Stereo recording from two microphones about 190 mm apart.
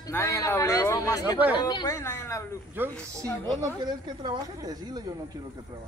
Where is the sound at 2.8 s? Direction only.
10° right (ahead or behind).